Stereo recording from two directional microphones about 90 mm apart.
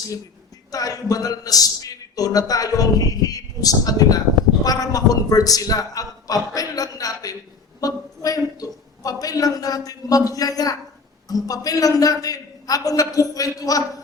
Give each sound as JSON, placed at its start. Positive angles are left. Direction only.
{"t": 0.7, "sound": "a man's voice", "side_deg": 40}